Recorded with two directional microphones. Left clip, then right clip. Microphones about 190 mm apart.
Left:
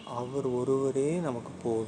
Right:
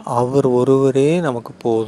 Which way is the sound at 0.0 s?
50° right (ahead or behind).